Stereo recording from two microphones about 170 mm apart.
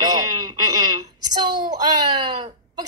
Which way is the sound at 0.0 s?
25° right (ahead or behind).